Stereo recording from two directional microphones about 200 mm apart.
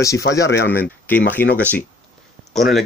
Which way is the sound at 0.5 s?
55° left (ahead or behind).